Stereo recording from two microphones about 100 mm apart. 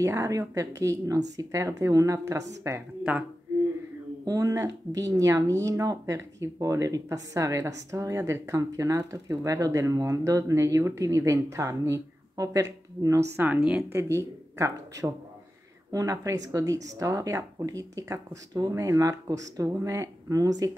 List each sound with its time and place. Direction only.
0.0 s a woman's voice: 30° right (ahead or behind)
4.2 s a woman's voice: 35° right (ahead or behind)